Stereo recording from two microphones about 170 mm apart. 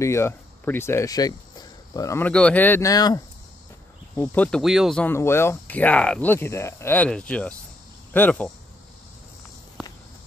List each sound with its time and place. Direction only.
0.0 s speech: 15° left (ahead or behind)
4.1 s speech: 10° left (ahead or behind)